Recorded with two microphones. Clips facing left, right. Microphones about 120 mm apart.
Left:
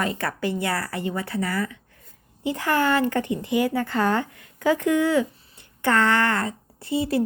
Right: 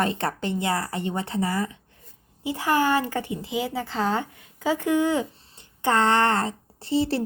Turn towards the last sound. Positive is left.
turn(degrees=-30)  # may be behind; listen again after turning